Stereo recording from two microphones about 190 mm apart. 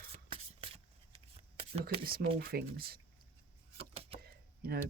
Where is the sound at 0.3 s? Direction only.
30° right (ahead or behind).